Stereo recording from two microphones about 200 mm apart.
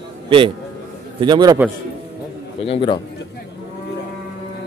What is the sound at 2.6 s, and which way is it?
Speech, 25° left (ahead or behind).